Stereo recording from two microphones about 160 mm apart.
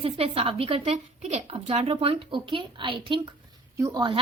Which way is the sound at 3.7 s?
20° right (ahead or behind).